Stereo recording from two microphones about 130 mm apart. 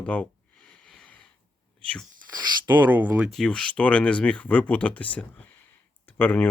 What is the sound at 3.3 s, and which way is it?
Speech, 5° left (ahead or behind).